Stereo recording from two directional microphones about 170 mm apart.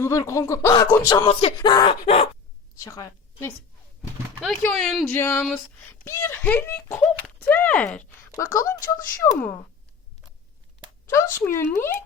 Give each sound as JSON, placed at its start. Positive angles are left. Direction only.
{"t": 0.0, "sound": "speech", "side_deg": 15}
{"t": 1.3, "sound": "speech", "side_deg": 35}
{"t": 2.8, "sound": "a woman's voice", "side_deg": 20}
{"t": 4.6, "sound": "speech", "side_deg": 5}
{"t": 5.1, "sound": "speech", "side_deg": 15}
{"t": 8.4, "sound": "speech", "side_deg": 20}
{"t": 11.1, "sound": "speech", "side_deg": 15}